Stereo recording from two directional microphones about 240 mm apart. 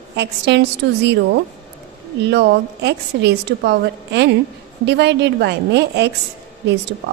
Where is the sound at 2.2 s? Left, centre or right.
Right.